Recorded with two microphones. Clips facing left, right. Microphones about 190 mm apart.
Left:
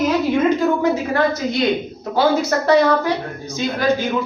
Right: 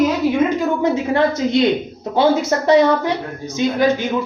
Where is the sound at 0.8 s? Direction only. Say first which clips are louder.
Right 1 dB; 25° right (ahead or behind).